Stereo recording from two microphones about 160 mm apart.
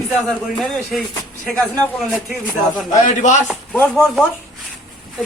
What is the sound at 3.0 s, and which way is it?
Speech, 50° left (ahead or behind).